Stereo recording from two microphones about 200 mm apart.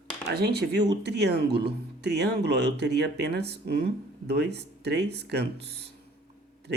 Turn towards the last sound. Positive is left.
turn(degrees=-55)  # may be behind; listen again after turning